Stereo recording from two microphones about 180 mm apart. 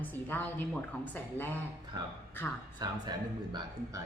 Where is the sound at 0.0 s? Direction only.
10° left (ahead or behind).